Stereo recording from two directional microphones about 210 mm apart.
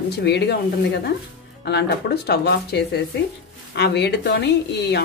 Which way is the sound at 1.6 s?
50° left (ahead or behind).